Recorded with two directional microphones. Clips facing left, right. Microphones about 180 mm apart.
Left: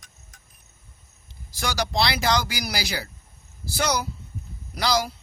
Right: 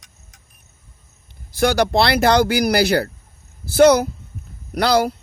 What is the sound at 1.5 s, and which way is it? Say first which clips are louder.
Speech: right 11 dB; 60° right (ahead or behind).